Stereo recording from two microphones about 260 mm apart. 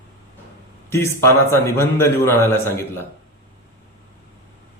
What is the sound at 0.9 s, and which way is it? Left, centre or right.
Speech, centre.